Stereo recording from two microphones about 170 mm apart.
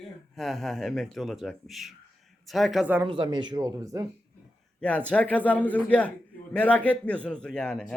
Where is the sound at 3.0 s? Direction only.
30° right (ahead or behind).